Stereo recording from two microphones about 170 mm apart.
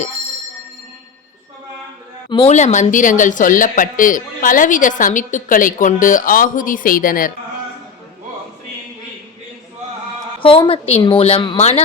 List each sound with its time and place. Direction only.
2.3 s a woman's voice: 30° left (ahead or behind)
2.6 s speech: 45° left (ahead or behind)
10.4 s a woman's voice: 30° left (ahead or behind)